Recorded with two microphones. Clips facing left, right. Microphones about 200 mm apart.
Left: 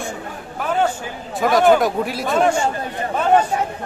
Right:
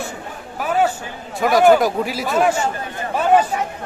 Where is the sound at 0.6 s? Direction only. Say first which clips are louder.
Right 1 dB; 5° right (ahead or behind).